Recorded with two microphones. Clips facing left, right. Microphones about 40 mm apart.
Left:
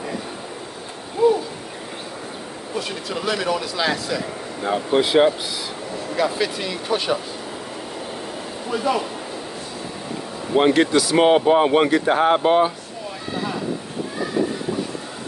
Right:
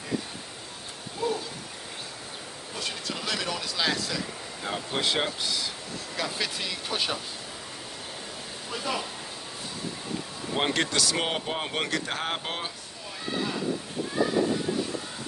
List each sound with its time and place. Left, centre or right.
1.2 s a sound: centre
2.7 s speech: centre
8.6 s speech: left
10.5 s speech: centre